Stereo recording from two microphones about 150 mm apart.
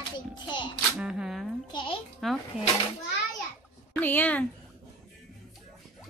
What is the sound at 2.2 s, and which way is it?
Speech, centre (ahead or behind).